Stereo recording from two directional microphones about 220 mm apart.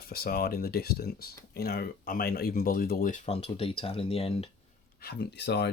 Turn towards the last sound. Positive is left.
turn(degrees=50)  # may be behind; listen again after turning